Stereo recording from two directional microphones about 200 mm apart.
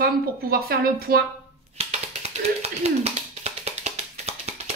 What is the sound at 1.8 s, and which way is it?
Music, 30° right (ahead or behind).